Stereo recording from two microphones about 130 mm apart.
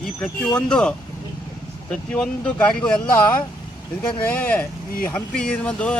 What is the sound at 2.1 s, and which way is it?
Speech, 10° left (ahead or behind).